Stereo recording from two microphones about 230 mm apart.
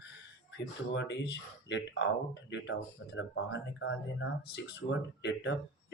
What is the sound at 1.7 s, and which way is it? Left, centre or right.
Speech, left.